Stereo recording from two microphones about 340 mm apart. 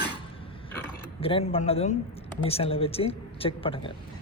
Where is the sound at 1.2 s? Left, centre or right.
Centre.